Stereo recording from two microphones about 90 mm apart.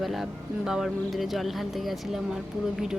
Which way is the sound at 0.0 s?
Centre (ahead or behind).